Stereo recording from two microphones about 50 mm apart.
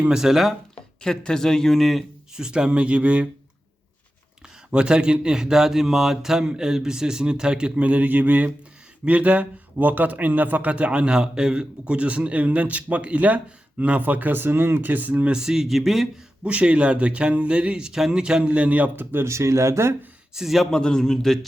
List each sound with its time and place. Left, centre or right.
0.1 s a man's voice: centre
1.0 s a man's voice: centre
2.3 s a man's voice: centre
4.7 s a man's voice: centre
7.8 s a man's voice: right
15.3 s speech: centre
16.4 s a man's voice: right
18.9 s speech: right
19.3 s speech: right
20.3 s speech: centre
20.7 s a man's voice: centre